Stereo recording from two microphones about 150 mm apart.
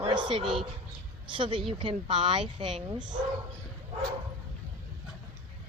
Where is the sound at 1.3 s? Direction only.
35° right (ahead or behind).